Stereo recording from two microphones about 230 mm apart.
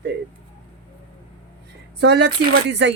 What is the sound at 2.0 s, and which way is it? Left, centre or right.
Speech, right.